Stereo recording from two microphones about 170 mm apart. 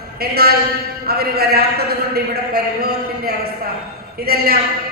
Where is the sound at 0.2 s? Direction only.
65° right (ahead or behind).